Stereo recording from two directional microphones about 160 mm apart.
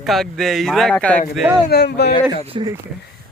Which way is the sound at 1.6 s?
90° left.